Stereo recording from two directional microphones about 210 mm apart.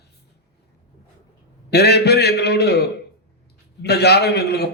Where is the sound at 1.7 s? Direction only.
50° left (ahead or behind).